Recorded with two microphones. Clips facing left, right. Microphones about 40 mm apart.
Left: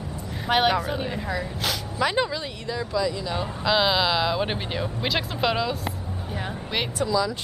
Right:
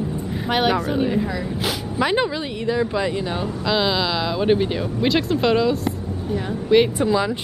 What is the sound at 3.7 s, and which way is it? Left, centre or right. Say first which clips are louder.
Speech: even; centre.